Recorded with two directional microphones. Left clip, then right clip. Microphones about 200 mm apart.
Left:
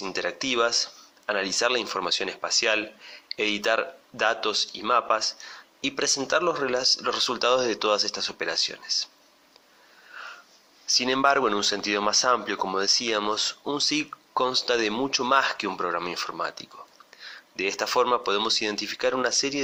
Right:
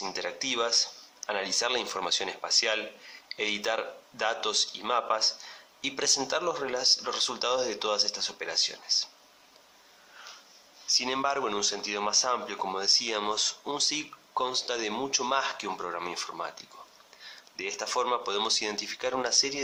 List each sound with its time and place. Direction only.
0.0 s speech: 15° left (ahead or behind)
10.8 s speech: 20° left (ahead or behind)